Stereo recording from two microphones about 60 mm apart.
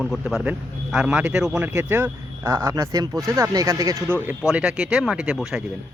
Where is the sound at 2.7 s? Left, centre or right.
Right.